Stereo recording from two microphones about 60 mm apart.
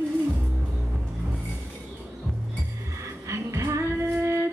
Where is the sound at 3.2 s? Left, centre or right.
Right.